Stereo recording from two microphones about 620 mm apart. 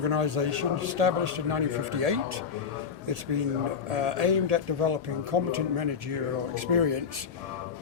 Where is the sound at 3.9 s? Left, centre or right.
Right.